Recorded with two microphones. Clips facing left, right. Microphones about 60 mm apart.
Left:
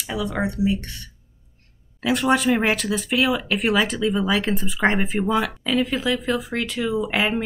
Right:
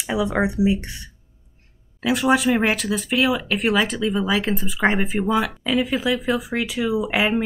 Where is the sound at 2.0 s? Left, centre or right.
Centre.